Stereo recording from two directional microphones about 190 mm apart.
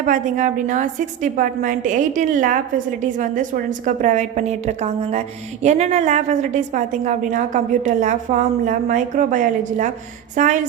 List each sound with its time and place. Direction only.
0.0 s a woman's voice: 45° right (ahead or behind)